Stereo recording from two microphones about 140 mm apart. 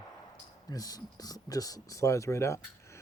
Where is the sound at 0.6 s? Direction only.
25° left (ahead or behind).